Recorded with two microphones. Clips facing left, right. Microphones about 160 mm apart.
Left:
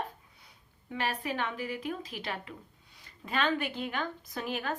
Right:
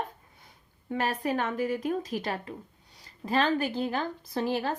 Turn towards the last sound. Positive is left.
turn(degrees=-30)  # may be behind; listen again after turning